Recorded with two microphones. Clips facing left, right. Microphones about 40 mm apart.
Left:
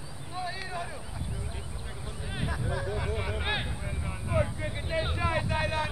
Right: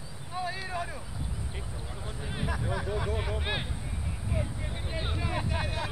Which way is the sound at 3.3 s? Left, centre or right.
Centre.